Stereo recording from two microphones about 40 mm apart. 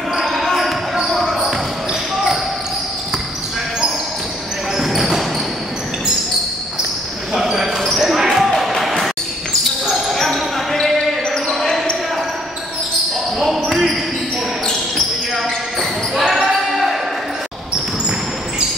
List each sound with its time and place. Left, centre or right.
0.3 s basketball bounce: centre
4.7 s basketball bounce: centre
7.5 s basketball bounce: centre
10.1 s basketball bounce: centre
13.7 s basketball bounce: centre
15.3 s basketball bounce: centre